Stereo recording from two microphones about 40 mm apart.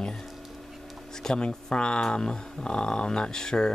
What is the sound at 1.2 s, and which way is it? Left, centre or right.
Speech, centre.